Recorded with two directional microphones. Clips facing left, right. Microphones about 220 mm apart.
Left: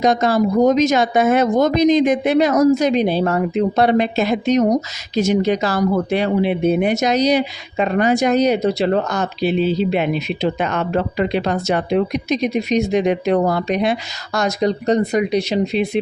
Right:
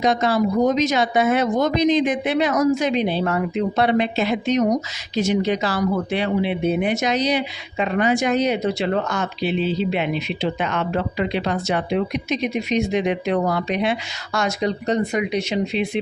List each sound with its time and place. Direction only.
0.0 s speech: 45° left (ahead or behind)